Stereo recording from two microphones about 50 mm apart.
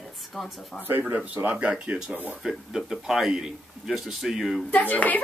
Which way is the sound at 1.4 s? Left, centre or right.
Right.